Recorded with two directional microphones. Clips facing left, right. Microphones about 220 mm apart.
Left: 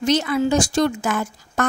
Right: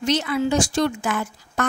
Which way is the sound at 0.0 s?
45° left (ahead or behind).